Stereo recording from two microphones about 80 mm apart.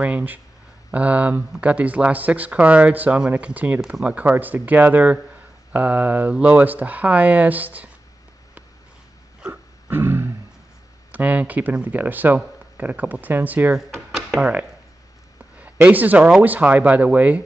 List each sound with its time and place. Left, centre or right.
0.0 s speech: centre
3.8 s speech: centre
4.1 s speech: right
9.5 s a sound: right
11.1 s speech: centre
13.9 s a sound: centre
14.4 s speech: right
15.5 s a sound: centre
16.4 s speech: centre